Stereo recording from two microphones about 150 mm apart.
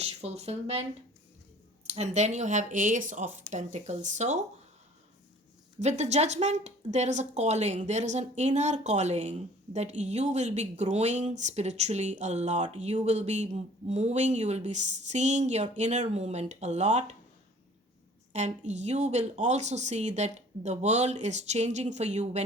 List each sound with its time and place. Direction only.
0.2 s speech: 45° right (ahead or behind)
1.9 s speech: 50° right (ahead or behind)
5.8 s speech: 50° right (ahead or behind)
18.3 s speech: 50° right (ahead or behind)